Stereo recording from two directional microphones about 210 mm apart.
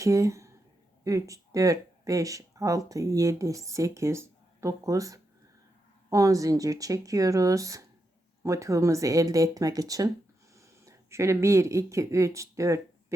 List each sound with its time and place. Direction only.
0.0 s speech: 15° right (ahead or behind)